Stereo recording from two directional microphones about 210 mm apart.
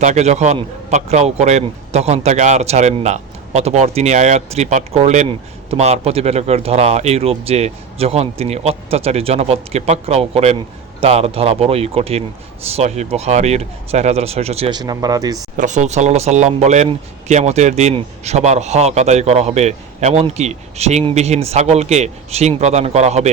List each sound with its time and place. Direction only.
0.0 s speech: 35° right (ahead or behind); by 15.4 s 15° right (ahead or behind)
15.5 s speech: 35° right (ahead or behind)